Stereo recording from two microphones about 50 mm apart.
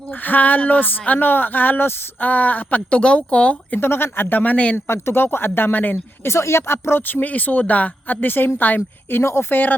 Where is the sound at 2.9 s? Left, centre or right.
Left.